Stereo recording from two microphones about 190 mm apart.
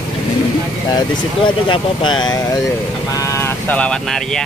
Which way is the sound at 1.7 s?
25° left (ahead or behind).